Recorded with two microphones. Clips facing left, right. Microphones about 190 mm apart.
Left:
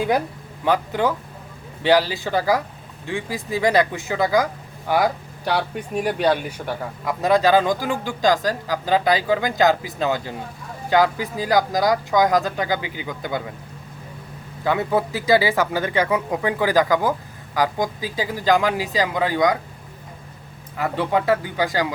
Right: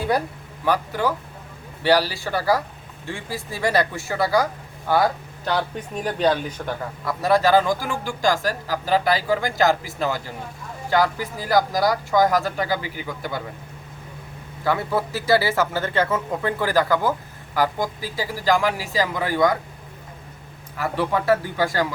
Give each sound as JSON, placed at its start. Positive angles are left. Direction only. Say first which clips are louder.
{"t": 0.6, "sound": "a man's voice", "louder": "left 2 dB", "side_deg": 20}
{"t": 5.5, "sound": "a man's voice", "louder": "left 1 dB", "side_deg": 10}
{"t": 14.6, "sound": "speech", "louder": "left 2 dB", "side_deg": 20}
{"t": 20.7, "sound": "speech", "louder": "left 2 dB", "side_deg": 20}